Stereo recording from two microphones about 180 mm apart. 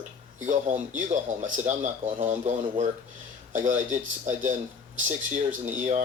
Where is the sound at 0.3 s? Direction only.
45° right (ahead or behind).